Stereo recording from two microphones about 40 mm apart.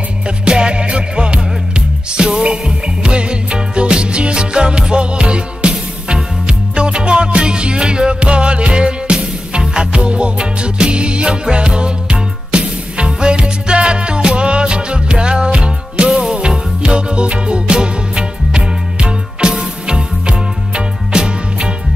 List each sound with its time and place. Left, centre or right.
0.5 s music: right